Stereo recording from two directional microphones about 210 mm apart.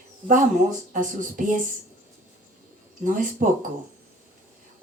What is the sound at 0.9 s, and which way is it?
Speech, 40° right (ahead or behind).